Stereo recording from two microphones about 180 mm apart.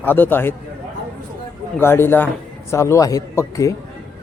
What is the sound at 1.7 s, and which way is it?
A man's voice, 15° left (ahead or behind).